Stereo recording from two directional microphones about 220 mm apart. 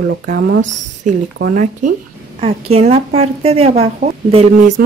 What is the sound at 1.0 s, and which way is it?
A woman's voice, 35° right (ahead or behind).